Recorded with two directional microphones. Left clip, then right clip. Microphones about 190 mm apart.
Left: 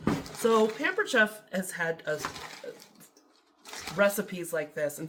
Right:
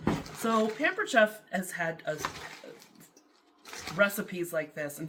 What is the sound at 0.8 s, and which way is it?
Speech, 25° left (ahead or behind).